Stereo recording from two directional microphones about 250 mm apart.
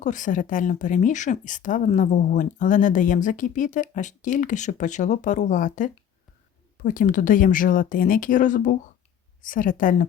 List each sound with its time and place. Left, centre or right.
0.0 s speech: left